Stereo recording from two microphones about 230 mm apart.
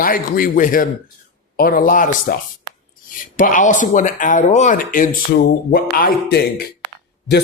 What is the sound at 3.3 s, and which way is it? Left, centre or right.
Speech, left.